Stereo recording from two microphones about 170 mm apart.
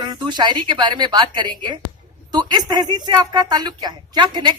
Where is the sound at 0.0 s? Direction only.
25° right (ahead or behind).